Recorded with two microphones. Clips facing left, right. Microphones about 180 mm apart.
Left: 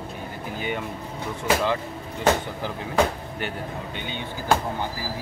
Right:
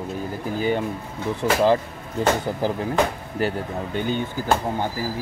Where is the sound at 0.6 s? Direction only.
35° right (ahead or behind).